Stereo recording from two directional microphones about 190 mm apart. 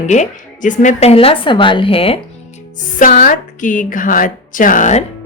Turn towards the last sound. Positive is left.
turn(degrees=40)  # may be behind; listen again after turning